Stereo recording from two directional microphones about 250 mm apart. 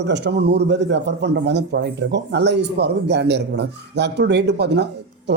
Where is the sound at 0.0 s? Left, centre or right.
Right.